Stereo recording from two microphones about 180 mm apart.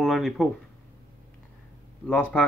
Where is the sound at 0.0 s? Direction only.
Centre (ahead or behind).